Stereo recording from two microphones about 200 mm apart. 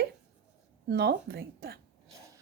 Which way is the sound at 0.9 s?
55° right (ahead or behind).